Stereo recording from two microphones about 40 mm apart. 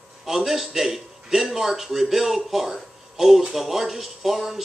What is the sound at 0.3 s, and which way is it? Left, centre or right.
A man's voice, centre.